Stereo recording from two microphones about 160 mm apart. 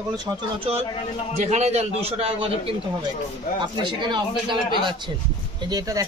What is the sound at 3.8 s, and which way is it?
Speech, 30° right (ahead or behind).